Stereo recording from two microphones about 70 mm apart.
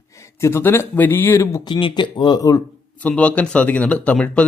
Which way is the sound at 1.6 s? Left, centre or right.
Left.